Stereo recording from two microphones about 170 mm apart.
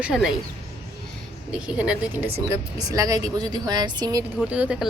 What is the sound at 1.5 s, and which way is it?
Speech, 5° right (ahead or behind).